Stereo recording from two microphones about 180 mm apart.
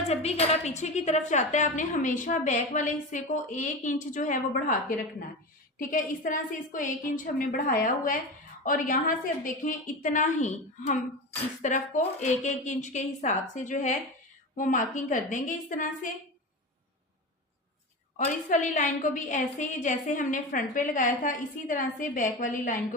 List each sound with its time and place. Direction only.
0.1 s a woman's voice: 35° left (ahead or behind)
5.9 s a woman's voice: 50° left (ahead or behind)
18.3 s a woman's voice: 45° left (ahead or behind)